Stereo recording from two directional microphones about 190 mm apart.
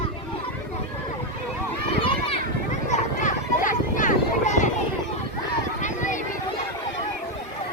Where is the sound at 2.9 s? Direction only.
40° left (ahead or behind).